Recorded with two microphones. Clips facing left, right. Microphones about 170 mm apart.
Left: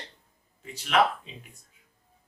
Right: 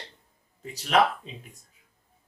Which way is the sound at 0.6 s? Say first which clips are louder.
Right 1 dB; 35° right (ahead or behind).